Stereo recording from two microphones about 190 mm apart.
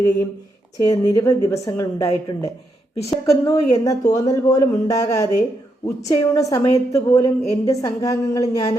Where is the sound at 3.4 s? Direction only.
20° left (ahead or behind).